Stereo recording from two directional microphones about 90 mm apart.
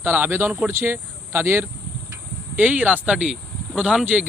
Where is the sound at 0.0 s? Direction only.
20° right (ahead or behind).